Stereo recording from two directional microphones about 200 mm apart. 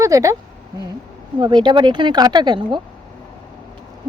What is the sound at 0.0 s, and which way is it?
Speech, 15° right (ahead or behind).